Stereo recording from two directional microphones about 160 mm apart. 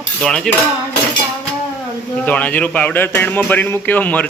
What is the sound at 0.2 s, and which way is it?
Speech, 5° left (ahead or behind).